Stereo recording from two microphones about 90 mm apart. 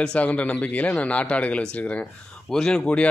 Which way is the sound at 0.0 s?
10° left (ahead or behind).